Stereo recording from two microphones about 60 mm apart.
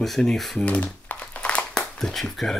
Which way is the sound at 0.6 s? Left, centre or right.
Left.